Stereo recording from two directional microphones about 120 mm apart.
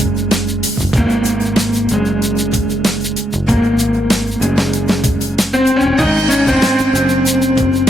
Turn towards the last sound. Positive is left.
turn(degrees=0)  # may be behind; listen again after turning